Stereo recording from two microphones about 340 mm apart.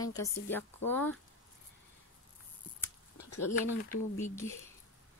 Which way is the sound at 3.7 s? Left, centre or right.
Left.